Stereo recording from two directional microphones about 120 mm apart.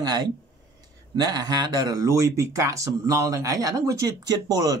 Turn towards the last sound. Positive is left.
turn(degrees=-30)  # may be behind; listen again after turning